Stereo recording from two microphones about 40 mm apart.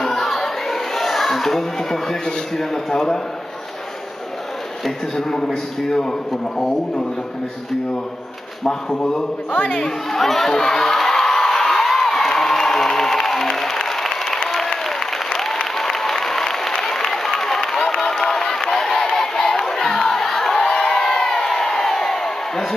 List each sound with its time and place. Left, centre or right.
0.0 s a sound: centre
4.8 s speech: centre
8.6 s speech: centre
10.2 s crowd: centre
16.8 s applause: centre
18.3 s crowd: centre